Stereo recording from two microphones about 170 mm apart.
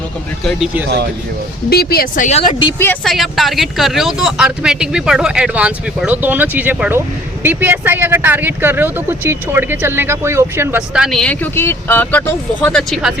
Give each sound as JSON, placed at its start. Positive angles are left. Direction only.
{"t": 0.4, "sound": "speech", "side_deg": -5}
{"t": 1.7, "sound": "speech", "side_deg": 65}
{"t": 2.7, "sound": "speech", "side_deg": 10}
{"t": 3.0, "sound": "speech", "side_deg": 0}